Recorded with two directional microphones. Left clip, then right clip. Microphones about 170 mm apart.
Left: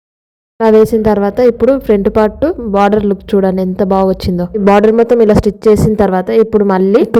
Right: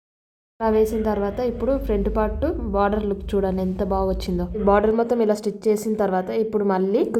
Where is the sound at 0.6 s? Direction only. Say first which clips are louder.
Left 12 dB; 45° left (ahead or behind).